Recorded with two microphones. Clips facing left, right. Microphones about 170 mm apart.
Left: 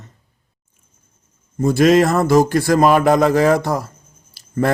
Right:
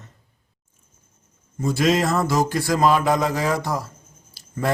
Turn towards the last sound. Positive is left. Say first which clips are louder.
# left 8 dB
turn(degrees=60)  # may be behind; listen again after turning